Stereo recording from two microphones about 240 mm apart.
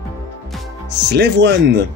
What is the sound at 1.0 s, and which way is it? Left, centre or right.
Speech, right.